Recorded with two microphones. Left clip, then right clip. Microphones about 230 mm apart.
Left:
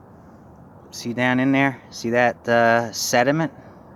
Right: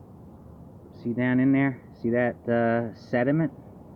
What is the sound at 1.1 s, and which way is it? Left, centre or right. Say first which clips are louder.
Speech: left 4 dB; centre.